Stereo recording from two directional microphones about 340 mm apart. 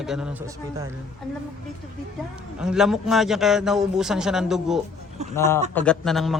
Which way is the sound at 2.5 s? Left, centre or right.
Centre.